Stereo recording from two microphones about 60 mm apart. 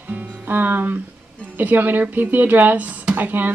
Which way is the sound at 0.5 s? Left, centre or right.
Right.